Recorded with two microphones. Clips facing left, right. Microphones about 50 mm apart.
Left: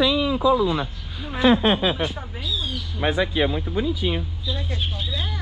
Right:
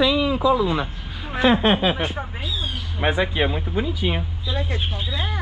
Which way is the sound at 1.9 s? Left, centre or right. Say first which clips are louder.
Right 1 dB; right.